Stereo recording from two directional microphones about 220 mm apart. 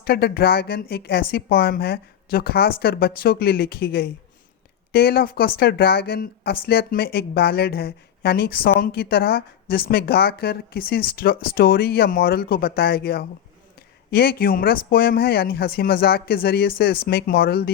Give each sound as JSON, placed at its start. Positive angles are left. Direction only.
{"t": 0.0, "sound": "speech", "side_deg": 45}